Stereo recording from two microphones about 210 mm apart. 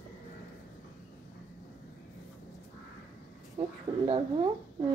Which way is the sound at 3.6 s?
30° right (ahead or behind).